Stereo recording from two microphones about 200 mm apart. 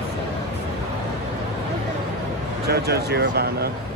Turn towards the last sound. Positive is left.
turn(degrees=-55)  # may be behind; listen again after turning